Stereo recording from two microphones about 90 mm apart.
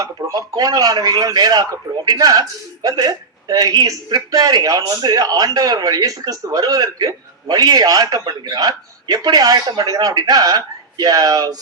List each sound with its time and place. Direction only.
0.0 s speech: 45° right (ahead or behind)